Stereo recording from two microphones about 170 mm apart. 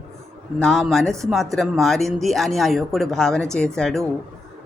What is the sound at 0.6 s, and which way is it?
Speech, centre (ahead or behind).